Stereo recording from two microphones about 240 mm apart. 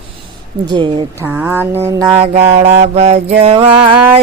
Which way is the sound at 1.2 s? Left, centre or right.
Centre.